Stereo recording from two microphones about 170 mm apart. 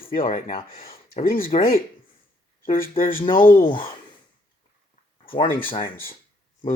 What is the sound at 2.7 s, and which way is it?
Speech, 55° left (ahead or behind).